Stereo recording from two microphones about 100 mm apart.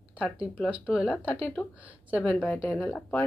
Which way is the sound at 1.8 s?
15° right (ahead or behind).